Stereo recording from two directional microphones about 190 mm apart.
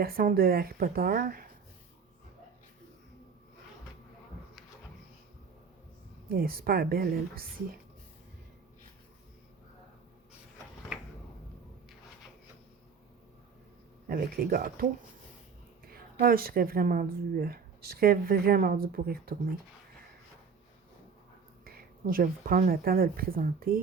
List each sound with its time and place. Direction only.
0.0 s speech: 50° right (ahead or behind)
6.2 s speech: 55° right (ahead or behind)
14.1 s speech: 50° right (ahead or behind)
15.9 s speech: 50° right (ahead or behind)
21.6 s speech: 50° right (ahead or behind)